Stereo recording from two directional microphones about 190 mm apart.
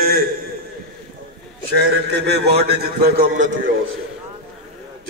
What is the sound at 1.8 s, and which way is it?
A man's voice, 65° right (ahead or behind).